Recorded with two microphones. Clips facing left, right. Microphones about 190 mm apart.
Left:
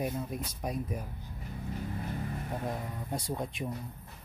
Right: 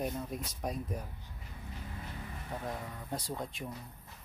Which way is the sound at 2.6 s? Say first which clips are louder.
Left 4 dB; 15° left (ahead or behind).